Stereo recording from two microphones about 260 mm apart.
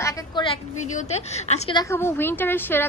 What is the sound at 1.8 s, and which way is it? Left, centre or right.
A woman's voice, centre.